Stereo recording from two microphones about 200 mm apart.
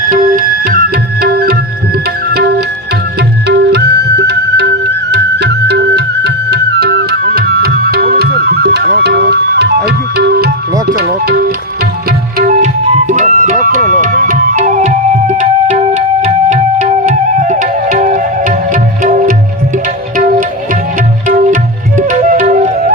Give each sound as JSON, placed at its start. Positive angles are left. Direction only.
{"t": 0.1, "sound": "tabla", "side_deg": -45}
{"t": 3.2, "sound": "flute", "side_deg": -55}
{"t": 10.8, "sound": "music", "side_deg": -50}
{"t": 21.2, "sound": "music", "side_deg": -40}